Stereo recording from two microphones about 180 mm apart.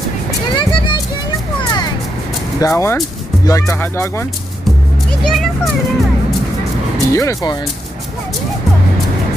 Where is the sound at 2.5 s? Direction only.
15° left (ahead or behind).